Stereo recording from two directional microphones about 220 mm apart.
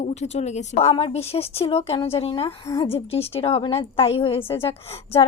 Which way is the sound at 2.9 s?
25° left (ahead or behind).